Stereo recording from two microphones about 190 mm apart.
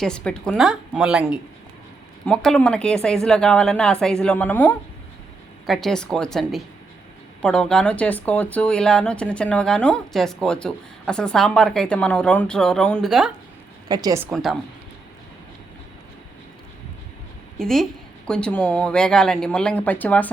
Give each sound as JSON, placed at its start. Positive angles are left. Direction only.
{"t": 0.0, "sound": "speech", "side_deg": 5}
{"t": 13.8, "sound": "speech", "side_deg": -20}
{"t": 14.3, "sound": "speech", "side_deg": 0}
{"t": 17.6, "sound": "speech", "side_deg": 0}